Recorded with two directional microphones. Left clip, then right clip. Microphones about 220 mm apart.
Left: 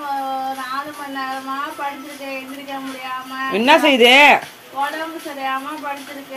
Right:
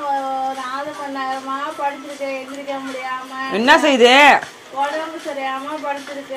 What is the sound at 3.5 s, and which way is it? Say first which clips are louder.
Speech: even; 5° left (ahead or behind).